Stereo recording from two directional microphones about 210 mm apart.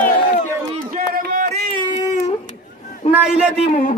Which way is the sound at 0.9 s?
45° right (ahead or behind).